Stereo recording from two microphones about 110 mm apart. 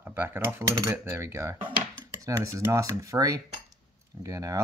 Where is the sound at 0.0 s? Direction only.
20° right (ahead or behind).